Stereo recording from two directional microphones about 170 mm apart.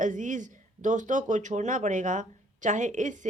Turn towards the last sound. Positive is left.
turn(degrees=-45)  # may be behind; listen again after turning